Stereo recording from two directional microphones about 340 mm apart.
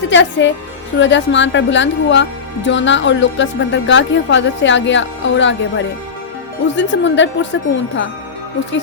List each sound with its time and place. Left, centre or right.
0.1 s speech: left